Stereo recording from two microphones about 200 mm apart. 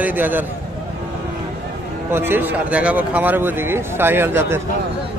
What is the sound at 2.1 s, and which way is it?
Speech, 10° right (ahead or behind).